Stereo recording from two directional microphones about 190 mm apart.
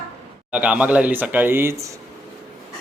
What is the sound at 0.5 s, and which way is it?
Speech, 5° right (ahead or behind).